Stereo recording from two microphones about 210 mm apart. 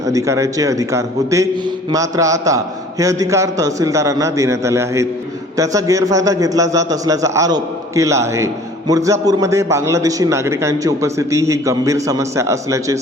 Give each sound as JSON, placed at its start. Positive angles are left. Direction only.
{"t": 0.0, "sound": "a man's voice", "side_deg": -15}